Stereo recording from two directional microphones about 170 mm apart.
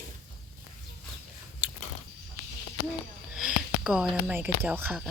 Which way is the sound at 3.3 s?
5° right (ahead or behind).